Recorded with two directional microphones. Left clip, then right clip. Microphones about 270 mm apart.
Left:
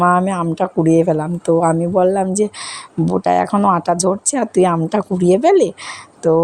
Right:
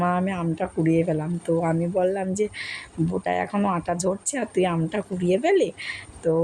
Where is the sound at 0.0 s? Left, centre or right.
Left.